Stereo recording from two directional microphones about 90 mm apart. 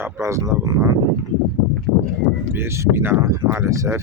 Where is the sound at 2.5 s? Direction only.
30° right (ahead or behind).